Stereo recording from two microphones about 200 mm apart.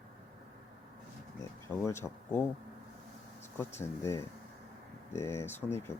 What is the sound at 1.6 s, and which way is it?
Speech, 15° left (ahead or behind).